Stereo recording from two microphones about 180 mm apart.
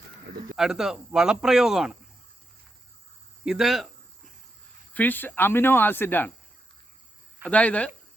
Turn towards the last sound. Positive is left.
turn(degrees=5)  # may be behind; listen again after turning